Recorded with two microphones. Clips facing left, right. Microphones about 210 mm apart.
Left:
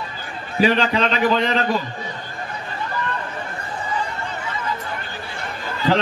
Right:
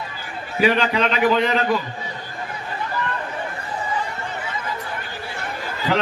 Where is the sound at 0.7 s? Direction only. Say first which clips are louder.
Even; 30° left (ahead or behind).